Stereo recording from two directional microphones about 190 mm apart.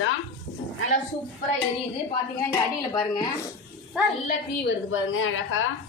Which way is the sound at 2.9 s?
20° left (ahead or behind).